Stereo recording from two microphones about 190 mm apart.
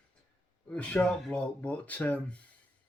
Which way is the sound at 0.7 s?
5° left (ahead or behind).